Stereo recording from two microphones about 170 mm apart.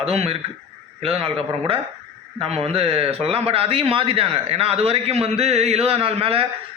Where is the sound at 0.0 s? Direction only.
35° right (ahead or behind).